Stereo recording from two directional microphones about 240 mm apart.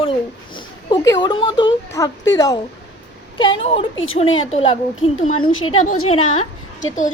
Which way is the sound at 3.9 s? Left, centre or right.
Left.